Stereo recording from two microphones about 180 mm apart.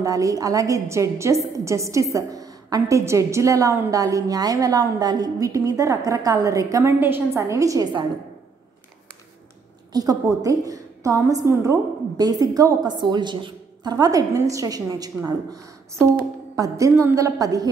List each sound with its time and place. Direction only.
0.0 s a woman's voice: 20° right (ahead or behind)
9.9 s a woman's voice: 20° right (ahead or behind)